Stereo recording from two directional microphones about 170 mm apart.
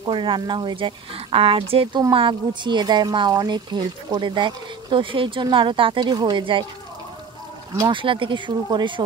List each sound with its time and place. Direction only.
0.0 s speech: 30° right (ahead or behind)
7.9 s speech: 30° right (ahead or behind)